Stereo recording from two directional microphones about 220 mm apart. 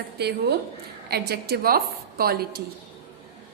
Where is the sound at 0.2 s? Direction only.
50° right (ahead or behind).